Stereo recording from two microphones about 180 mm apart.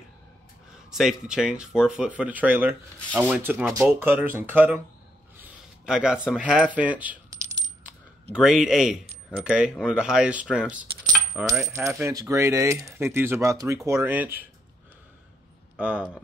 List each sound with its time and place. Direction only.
0.9 s speech: 5° right (ahead or behind)
3.7 s coin: 15° right (ahead or behind)
5.9 s speech: 5° right (ahead or behind)
8.3 s speech: centre (ahead or behind)
11.6 s coin: 15° right (ahead or behind)
15.8 s coin: 5° right (ahead or behind)